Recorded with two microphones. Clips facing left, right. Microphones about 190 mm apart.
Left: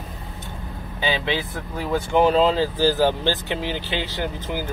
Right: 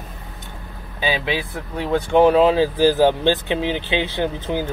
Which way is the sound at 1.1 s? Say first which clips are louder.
Right 1 dB; 25° left (ahead or behind).